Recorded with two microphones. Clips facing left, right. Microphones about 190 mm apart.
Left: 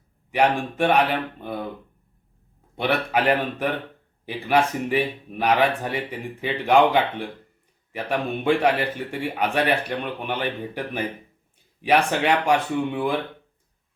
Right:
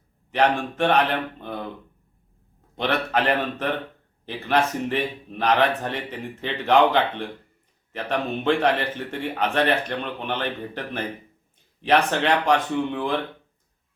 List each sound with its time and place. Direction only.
0.3 s a man's voice: 10° left (ahead or behind)
2.7 s a man's voice: 10° left (ahead or behind)